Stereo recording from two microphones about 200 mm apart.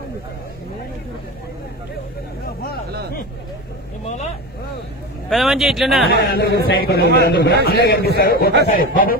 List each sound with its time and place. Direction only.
5.3 s a man's voice: centre (ahead or behind)
6.2 s speech: 50° left (ahead or behind)